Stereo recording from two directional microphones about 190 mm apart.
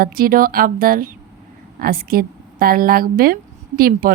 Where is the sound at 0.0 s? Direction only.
50° right (ahead or behind).